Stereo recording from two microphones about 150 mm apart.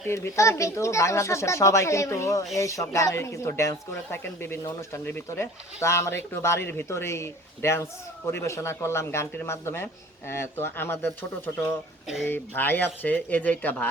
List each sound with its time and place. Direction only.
0.0 s speech: 20° left (ahead or behind)